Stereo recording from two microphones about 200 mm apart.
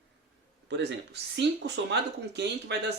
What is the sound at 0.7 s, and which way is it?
Speech, 60° right (ahead or behind).